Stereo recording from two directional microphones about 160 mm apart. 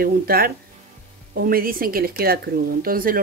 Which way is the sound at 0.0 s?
70° right (ahead or behind).